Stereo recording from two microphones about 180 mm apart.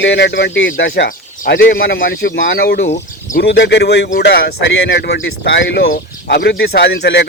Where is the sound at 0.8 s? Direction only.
70° left (ahead or behind).